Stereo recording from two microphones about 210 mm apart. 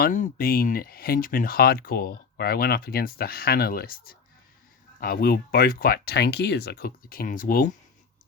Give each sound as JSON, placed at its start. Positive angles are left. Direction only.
{"t": 0.0, "sound": "speech", "side_deg": 40}